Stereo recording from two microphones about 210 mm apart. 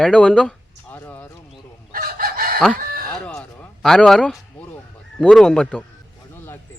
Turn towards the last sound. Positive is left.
turn(degrees=5)  # may be behind; listen again after turning